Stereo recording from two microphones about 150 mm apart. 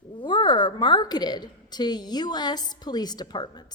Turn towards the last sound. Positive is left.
turn(degrees=30)  # may be behind; listen again after turning